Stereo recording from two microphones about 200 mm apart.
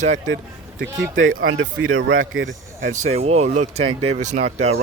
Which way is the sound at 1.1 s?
80° right.